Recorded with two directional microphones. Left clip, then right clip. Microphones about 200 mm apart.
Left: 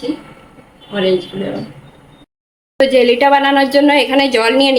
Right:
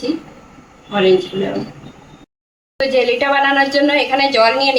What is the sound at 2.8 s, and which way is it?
A woman's voice, 50° left (ahead or behind).